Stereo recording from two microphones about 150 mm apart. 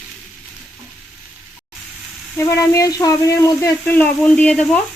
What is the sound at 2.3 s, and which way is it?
Speech, 20° left (ahead or behind).